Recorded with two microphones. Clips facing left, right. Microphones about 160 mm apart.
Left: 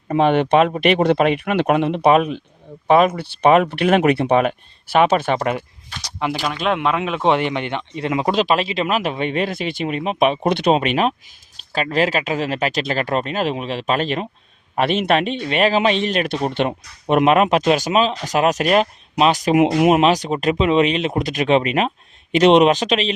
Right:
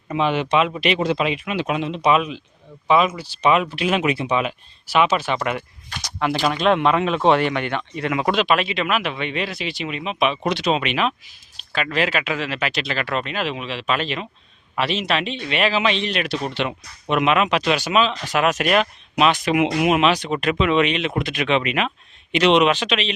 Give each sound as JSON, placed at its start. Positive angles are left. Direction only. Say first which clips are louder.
{"t": 0.1, "sound": "speech", "louder": "left 5 dB", "side_deg": 55}
{"t": 5.4, "sound": "speech", "louder": "left 3 dB", "side_deg": 35}
{"t": 6.1, "sound": "speech", "louder": "right 1 dB", "side_deg": 15}
{"t": 6.6, "sound": "speech", "louder": "right 2 dB", "side_deg": 5}